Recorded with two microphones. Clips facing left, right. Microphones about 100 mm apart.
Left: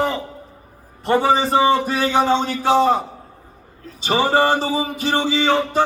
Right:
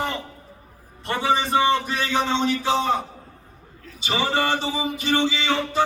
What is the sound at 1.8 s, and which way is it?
Speech, 40° left (ahead or behind).